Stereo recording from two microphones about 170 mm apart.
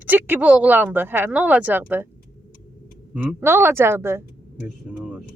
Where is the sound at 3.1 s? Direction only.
10° right (ahead or behind).